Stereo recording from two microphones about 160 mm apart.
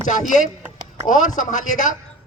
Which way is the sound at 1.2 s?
55° left (ahead or behind).